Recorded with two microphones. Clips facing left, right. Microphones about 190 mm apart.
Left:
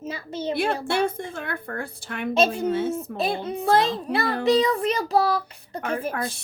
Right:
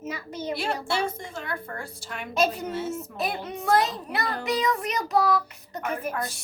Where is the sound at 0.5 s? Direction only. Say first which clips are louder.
Left 4 dB; 55° left (ahead or behind).